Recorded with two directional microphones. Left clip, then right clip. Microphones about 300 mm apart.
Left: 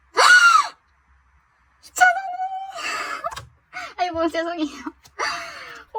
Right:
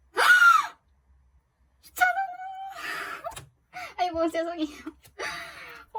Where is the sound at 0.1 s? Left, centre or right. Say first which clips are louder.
Left 5 dB; centre.